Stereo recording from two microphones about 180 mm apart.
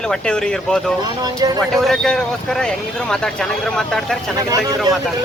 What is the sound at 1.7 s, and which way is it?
Speech, centre (ahead or behind).